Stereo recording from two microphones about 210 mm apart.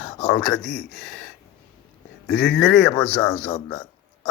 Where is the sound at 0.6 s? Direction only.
55° left (ahead or behind).